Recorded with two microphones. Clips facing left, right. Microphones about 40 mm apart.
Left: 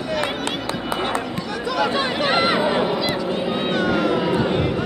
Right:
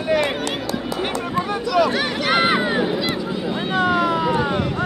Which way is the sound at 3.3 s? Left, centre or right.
Left.